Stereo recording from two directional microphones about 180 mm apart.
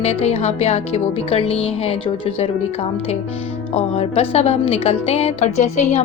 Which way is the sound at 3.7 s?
35° left (ahead or behind).